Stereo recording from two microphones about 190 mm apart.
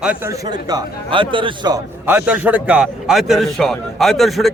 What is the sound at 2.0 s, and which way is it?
A man's voice, 10° right (ahead or behind).